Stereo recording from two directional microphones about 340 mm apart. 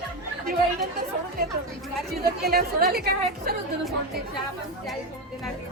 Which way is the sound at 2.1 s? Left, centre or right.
Right.